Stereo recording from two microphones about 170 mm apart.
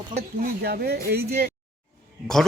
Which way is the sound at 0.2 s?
65° right (ahead or behind).